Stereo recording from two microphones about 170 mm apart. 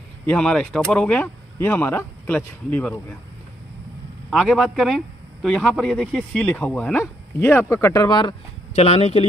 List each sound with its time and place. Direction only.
0.3 s speech: 5° left (ahead or behind)
4.3 s speech: centre (ahead or behind); by 8.4 s 25° left (ahead or behind)
8.7 s speech: 40° left (ahead or behind)